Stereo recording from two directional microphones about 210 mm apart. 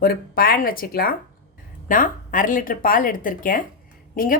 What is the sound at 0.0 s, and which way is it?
A woman's voice, 45° left (ahead or behind).